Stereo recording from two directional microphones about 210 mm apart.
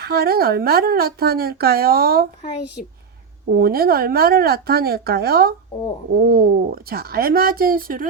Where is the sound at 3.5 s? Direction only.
45° right (ahead or behind).